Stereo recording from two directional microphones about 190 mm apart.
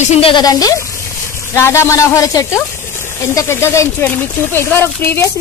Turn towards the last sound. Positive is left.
turn(degrees=10)  # may be behind; listen again after turning